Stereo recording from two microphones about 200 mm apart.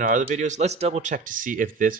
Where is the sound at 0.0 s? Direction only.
40° right (ahead or behind).